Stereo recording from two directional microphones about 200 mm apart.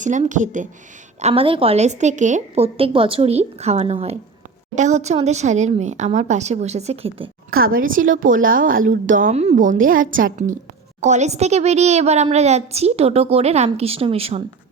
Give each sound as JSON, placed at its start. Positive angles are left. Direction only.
{"t": 0.0, "sound": "a woman's voice", "side_deg": -40}
{"t": 1.2, "sound": "a woman's voice", "side_deg": -30}
{"t": 7.5, "sound": "a woman's voice", "side_deg": -45}